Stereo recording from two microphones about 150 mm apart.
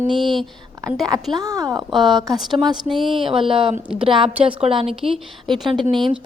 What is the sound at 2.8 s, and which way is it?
Speech, centre (ahead or behind).